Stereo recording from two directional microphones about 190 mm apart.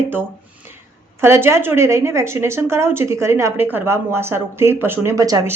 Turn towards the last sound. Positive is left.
turn(degrees=-20)  # may be behind; listen again after turning